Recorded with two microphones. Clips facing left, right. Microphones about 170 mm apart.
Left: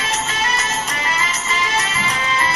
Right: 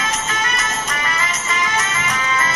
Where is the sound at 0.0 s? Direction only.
30° left (ahead or behind).